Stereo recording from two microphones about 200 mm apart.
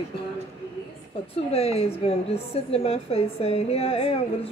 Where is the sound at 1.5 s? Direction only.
30° left (ahead or behind).